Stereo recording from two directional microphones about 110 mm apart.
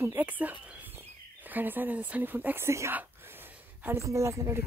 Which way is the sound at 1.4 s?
15° right (ahead or behind).